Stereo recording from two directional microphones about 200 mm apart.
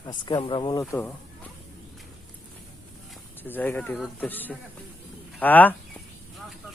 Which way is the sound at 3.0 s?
10° left (ahead or behind).